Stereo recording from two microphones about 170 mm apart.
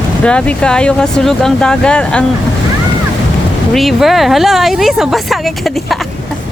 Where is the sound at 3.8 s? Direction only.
Centre (ahead or behind).